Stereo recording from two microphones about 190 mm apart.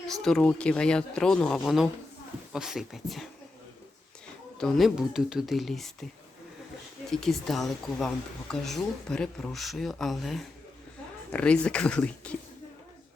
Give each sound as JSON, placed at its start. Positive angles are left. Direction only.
{"t": 0.1, "sound": "speech", "side_deg": 0}
{"t": 4.5, "sound": "speech", "side_deg": 5}
{"t": 7.1, "sound": "speech", "side_deg": 0}